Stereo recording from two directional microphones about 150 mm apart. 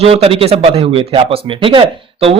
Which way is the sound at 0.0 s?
40° right (ahead or behind).